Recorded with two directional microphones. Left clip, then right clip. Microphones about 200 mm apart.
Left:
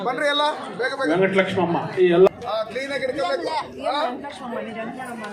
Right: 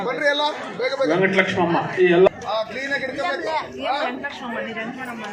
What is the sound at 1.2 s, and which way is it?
A man's voice, 25° right (ahead or behind).